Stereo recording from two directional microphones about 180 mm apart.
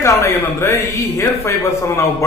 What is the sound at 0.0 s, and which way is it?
A man's voice, 15° left (ahead or behind).